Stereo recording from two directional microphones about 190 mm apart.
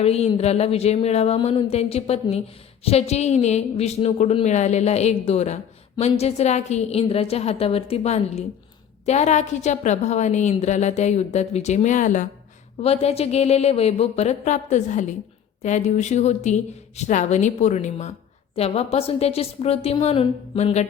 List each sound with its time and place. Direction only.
0.0 s a woman's voice: 35° left (ahead or behind)